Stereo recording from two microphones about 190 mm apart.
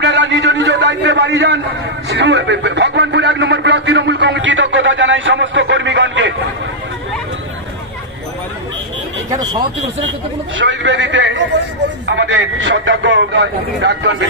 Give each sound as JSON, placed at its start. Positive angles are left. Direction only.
{"t": 0.0, "sound": "a sound", "side_deg": -65}
{"t": 9.3, "sound": "speech", "side_deg": -20}
{"t": 10.6, "sound": "a man's voice", "side_deg": -70}